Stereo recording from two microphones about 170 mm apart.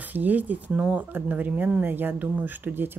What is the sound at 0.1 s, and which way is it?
Speech, 10° right (ahead or behind).